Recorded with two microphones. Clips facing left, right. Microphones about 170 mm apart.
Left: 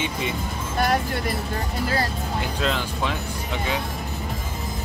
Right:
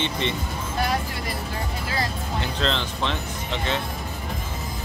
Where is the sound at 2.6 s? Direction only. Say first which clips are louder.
Left 1 dB; 10° left (ahead or behind).